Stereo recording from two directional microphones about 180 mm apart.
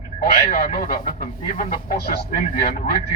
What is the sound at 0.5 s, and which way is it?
Speech, 55° left (ahead or behind).